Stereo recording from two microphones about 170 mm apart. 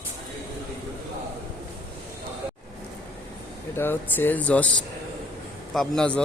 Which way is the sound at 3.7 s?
15° left (ahead or behind).